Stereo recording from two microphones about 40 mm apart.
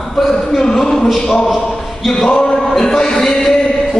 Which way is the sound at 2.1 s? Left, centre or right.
Centre.